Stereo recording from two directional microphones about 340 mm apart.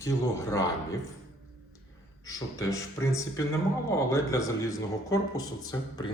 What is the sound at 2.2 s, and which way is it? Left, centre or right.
Speech, centre.